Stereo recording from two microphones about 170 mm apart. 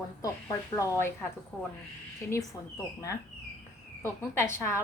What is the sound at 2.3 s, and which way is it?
A woman's voice, 15° left (ahead or behind).